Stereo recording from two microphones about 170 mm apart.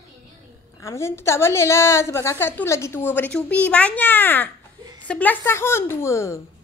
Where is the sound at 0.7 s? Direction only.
15° left (ahead or behind).